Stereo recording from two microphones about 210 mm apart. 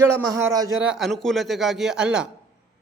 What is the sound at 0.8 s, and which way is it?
A man's voice, 5° right (ahead or behind).